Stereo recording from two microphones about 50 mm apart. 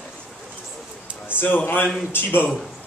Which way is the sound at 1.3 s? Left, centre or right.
Left.